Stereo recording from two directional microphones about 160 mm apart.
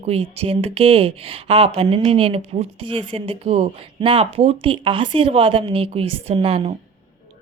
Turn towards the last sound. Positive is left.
turn(degrees=-35)  # may be behind; listen again after turning